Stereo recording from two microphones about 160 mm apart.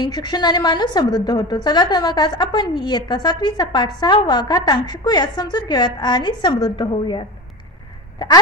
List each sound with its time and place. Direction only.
0.0 s a woman's voice: 25° left (ahead or behind)